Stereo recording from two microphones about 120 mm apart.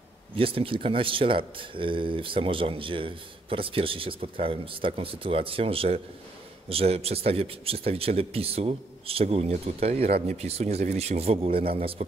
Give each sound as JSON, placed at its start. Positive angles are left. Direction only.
{"t": 0.4, "sound": "a man's voice", "side_deg": -50}